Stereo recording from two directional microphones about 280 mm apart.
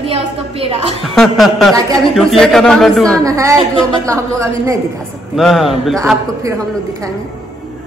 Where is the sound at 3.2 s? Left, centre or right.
Centre.